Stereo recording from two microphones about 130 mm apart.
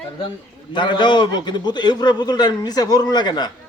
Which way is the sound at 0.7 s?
35° left (ahead or behind).